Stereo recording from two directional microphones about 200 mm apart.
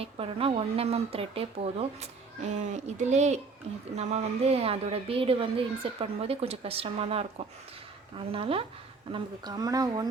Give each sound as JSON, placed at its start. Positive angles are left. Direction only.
{"t": 0.0, "sound": "a woman's voice", "side_deg": -30}